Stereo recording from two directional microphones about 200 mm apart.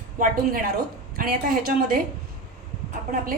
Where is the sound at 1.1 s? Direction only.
45° right (ahead or behind).